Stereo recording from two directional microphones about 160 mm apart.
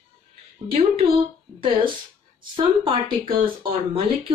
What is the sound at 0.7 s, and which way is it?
Speech, 35° right (ahead or behind).